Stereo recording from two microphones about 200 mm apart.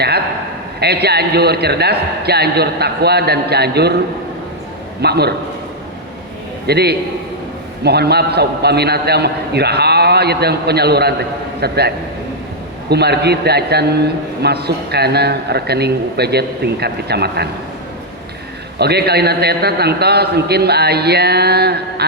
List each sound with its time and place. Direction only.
0.8 s a man's voice: 55° right (ahead or behind)
4.9 s a man's voice: 55° right (ahead or behind)
6.7 s a man's voice: 55° right (ahead or behind)
18.8 s a man's voice: 55° right (ahead or behind)